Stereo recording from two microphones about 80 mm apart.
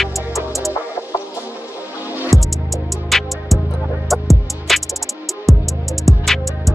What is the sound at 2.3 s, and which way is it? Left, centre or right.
Music, centre.